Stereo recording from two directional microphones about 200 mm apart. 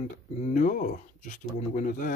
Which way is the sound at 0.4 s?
40° left (ahead or behind).